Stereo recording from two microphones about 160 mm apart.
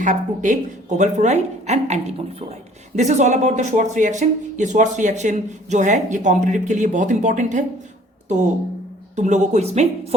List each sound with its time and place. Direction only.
0.0 s a woman's voice: 55° right (ahead or behind)
9.1 s a woman's voice: 50° right (ahead or behind)